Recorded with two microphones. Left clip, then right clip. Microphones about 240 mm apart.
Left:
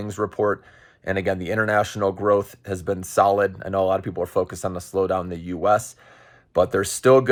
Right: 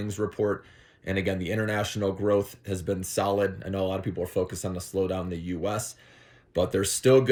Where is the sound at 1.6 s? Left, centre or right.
Centre.